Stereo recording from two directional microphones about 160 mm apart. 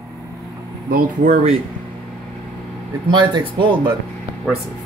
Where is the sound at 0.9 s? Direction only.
65° right (ahead or behind).